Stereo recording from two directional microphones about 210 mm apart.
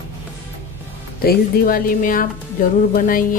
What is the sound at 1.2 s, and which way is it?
Speech, 45° left (ahead or behind).